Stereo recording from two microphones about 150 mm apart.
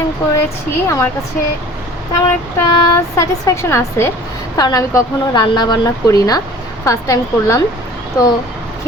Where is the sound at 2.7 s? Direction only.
25° left (ahead or behind).